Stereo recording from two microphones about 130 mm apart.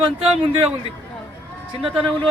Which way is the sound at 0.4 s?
45° right (ahead or behind).